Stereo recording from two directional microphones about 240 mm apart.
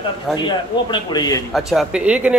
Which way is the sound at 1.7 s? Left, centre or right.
Centre.